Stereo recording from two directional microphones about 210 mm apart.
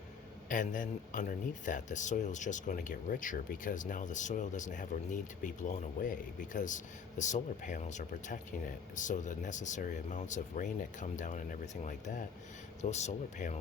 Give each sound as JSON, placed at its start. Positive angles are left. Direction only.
{"t": 0.4, "sound": "a man's voice", "side_deg": 40}